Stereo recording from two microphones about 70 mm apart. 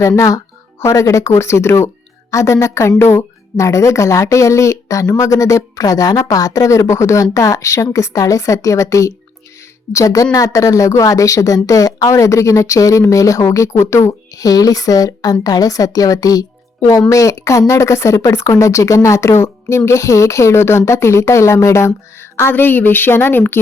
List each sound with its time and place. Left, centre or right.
0.2 s speech: left